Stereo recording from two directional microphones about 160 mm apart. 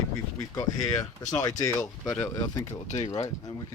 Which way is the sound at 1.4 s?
20° left (ahead or behind).